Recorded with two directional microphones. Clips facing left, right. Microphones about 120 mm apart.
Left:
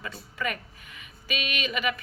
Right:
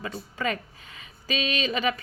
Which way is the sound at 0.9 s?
30° right (ahead or behind).